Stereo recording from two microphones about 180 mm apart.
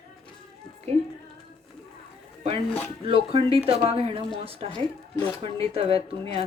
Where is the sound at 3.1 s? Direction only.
30° right (ahead or behind).